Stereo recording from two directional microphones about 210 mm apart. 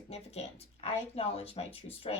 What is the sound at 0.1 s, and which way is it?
A woman's voice, 30° left (ahead or behind).